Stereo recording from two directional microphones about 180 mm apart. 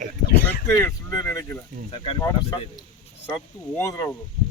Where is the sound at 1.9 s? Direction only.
25° left (ahead or behind).